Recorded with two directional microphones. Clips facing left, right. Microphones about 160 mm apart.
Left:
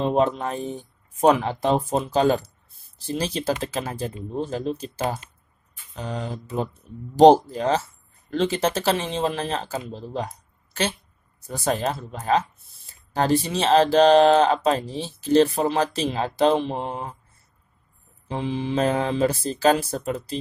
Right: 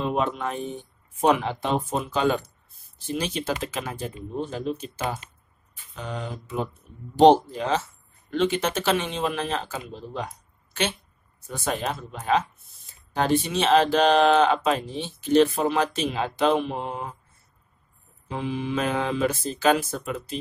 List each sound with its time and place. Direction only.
0.0 s speech: 35° left (ahead or behind)
18.3 s speech: 30° left (ahead or behind)